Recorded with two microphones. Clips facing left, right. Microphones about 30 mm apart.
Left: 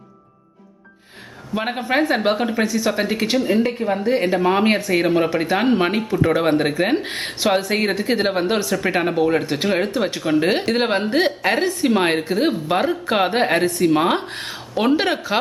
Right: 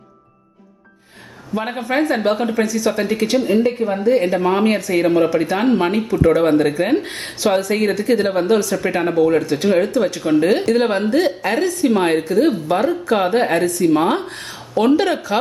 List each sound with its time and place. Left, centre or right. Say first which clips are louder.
1.5 s a woman's voice: right 1 dB; left
13.7 s speech: right 1 dB; left
13.9 s a woman's voice: right 1 dB; left